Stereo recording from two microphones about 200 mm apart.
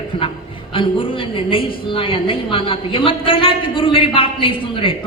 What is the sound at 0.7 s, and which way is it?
A woman's voice, 25° left (ahead or behind).